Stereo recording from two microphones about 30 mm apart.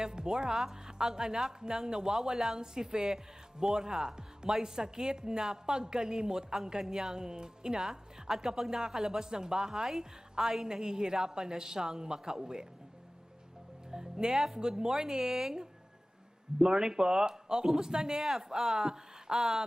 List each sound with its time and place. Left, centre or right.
0.0 s speech: right
13.9 s speech: right
14.3 s speech: centre